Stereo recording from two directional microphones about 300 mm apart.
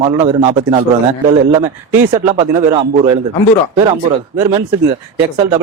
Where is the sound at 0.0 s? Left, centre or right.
Centre.